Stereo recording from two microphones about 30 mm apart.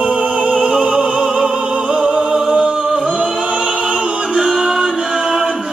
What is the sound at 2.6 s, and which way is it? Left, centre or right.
Singing, right.